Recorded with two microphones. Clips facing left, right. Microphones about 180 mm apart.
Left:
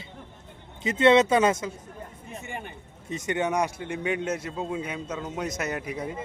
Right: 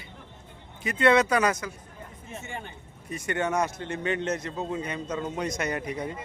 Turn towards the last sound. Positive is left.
turn(degrees=5)  # may be behind; listen again after turning